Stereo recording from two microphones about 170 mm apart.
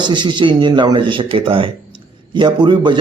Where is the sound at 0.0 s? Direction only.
25° right (ahead or behind).